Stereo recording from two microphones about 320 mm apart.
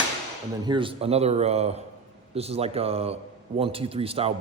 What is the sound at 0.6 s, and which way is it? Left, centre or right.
A man's voice, centre.